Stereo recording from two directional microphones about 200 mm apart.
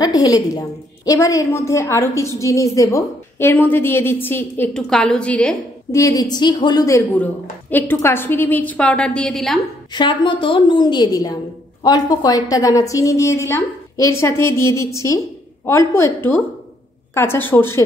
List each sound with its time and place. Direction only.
0.0 s a woman's voice: 20° left (ahead or behind)
5.9 s a woman's voice: 15° left (ahead or behind); by 9.6 s centre (ahead or behind)
9.9 s a woman's voice: 25° left (ahead or behind)